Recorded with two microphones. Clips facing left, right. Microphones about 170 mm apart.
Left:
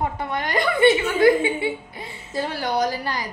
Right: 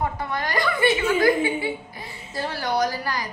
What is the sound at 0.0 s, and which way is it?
A woman's voice, 25° left (ahead or behind).